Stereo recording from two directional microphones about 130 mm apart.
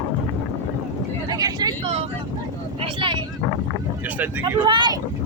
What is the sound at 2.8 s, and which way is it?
Speech, 40° right (ahead or behind).